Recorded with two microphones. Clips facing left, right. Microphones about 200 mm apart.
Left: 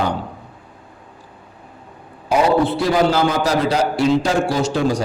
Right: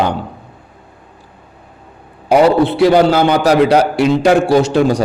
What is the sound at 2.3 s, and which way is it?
A man's voice, 70° right (ahead or behind).